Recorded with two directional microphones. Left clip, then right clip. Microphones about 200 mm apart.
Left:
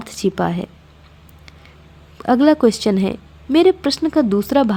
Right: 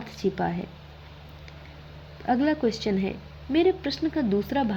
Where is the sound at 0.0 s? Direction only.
30° left (ahead or behind).